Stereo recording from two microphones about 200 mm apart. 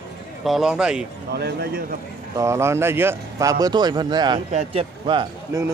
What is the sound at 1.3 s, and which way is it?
Speech, 55° right (ahead or behind).